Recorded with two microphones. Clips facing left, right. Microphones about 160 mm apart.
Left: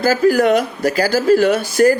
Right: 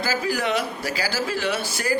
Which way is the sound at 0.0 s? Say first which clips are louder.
Left 11 dB; 50° left (ahead or behind).